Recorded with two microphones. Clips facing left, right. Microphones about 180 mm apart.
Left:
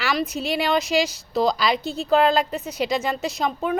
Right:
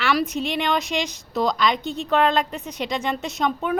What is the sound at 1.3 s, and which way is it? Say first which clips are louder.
Speech: left 1 dB; 30° left (ahead or behind).